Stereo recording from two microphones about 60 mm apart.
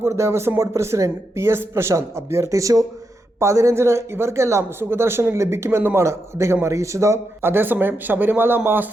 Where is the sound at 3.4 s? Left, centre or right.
Right.